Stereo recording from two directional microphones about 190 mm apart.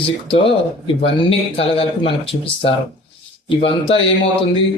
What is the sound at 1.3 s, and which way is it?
Speech, 30° left (ahead or behind).